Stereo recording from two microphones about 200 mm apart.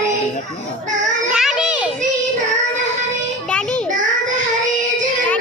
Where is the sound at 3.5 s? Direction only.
5° left (ahead or behind).